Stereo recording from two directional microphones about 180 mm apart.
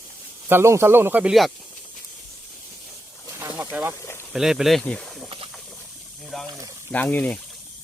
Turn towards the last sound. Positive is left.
turn(degrees=5)  # may be behind; listen again after turning